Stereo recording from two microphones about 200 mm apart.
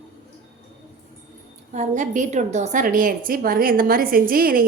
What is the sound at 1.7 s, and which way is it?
A woman's voice, 40° right (ahead or behind).